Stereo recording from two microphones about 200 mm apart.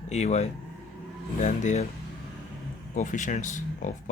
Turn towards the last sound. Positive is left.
turn(degrees=40)  # may be behind; listen again after turning